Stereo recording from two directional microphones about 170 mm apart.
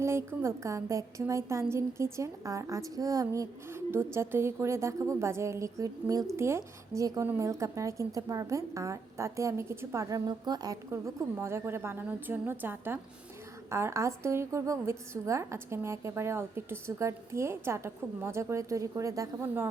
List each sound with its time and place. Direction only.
0.0 s a woman's voice: 15° right (ahead or behind)